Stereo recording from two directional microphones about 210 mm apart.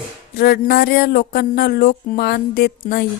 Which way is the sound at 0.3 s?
50° left (ahead or behind).